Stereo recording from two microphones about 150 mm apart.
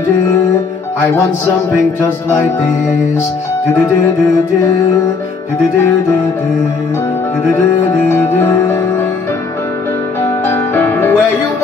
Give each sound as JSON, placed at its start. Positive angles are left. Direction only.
{"t": 8.1, "sound": "music", "side_deg": 15}
{"t": 10.2, "sound": "music", "side_deg": 15}